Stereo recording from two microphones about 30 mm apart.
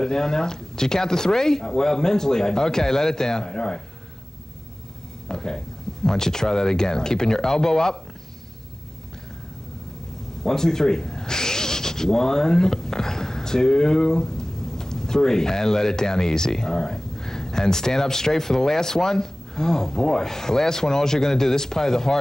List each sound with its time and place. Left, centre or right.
0.0 s speech: centre
5.3 s speech: centre
10.4 s speech: centre